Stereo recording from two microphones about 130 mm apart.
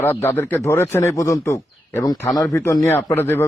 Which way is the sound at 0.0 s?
15° left (ahead or behind).